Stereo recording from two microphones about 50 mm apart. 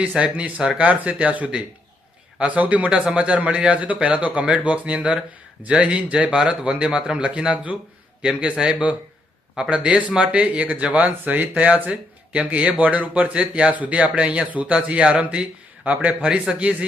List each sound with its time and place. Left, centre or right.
0.0 s speech: right
9.6 s speech: right